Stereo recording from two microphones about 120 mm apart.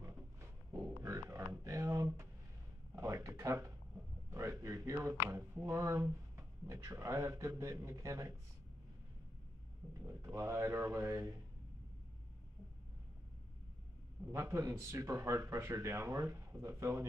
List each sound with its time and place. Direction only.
0.7 s a sound: 25° right (ahead or behind)
3.0 s speech: 25° right (ahead or behind)
10.0 s speech: 25° right (ahead or behind)
14.3 s speech: 25° right (ahead or behind)